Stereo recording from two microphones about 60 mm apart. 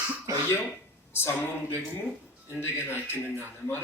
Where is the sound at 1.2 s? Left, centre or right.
Left.